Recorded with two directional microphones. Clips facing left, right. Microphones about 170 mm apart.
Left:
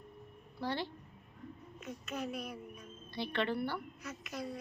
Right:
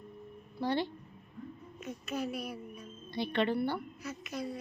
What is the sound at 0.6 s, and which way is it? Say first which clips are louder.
Speech: right 5 dB; 15° right (ahead or behind).